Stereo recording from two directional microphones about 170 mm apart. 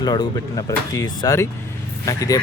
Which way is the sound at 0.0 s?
20° left (ahead or behind).